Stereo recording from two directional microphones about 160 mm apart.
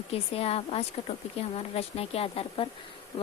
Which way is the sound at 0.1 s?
40° left (ahead or behind).